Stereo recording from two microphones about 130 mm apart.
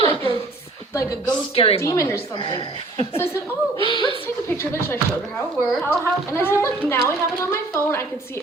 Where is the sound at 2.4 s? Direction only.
35° left (ahead or behind).